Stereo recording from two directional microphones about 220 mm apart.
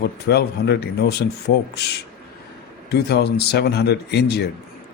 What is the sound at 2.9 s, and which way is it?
Speech, 45° left (ahead or behind).